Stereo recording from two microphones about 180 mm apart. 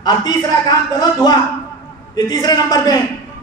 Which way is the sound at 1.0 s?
20° left (ahead or behind).